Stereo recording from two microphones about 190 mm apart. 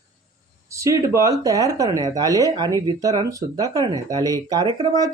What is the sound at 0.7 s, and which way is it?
Speech, 15° right (ahead or behind).